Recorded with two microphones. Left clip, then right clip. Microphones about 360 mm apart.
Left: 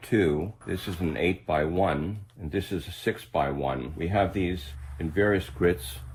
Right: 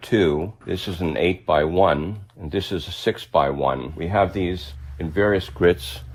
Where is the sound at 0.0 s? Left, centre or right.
Centre.